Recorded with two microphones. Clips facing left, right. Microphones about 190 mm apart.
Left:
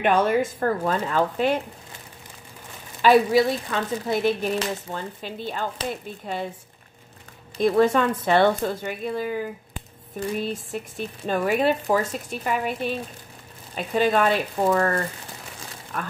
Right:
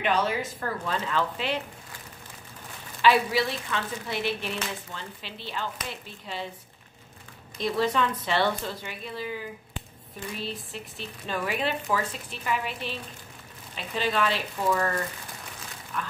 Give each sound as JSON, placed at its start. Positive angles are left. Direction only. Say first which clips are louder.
{"t": 0.0, "sound": "speech", "louder": "left 6 dB", "side_deg": 50}
{"t": 3.0, "sound": "speech", "louder": "left 6 dB", "side_deg": 45}
{"t": 7.5, "sound": "speech", "louder": "left 7 dB", "side_deg": 50}